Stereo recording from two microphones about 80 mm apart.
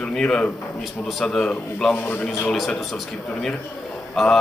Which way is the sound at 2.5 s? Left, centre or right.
Centre.